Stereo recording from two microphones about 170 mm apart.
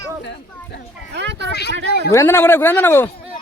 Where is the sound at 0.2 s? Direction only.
90° left.